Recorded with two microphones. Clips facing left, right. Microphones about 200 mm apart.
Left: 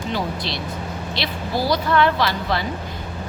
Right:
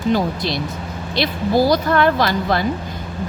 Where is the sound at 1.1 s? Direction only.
45° right (ahead or behind).